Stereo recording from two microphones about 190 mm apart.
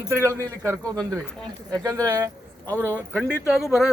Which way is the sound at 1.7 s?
20° right (ahead or behind).